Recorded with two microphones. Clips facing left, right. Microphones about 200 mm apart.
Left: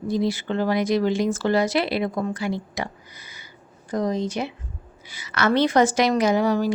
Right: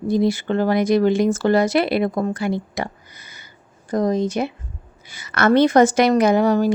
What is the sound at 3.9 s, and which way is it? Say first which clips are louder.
A woman's voice: right 5 dB; 50° right (ahead or behind).